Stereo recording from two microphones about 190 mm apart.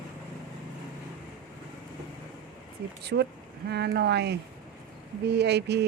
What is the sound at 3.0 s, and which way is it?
Speech, 60° right (ahead or behind).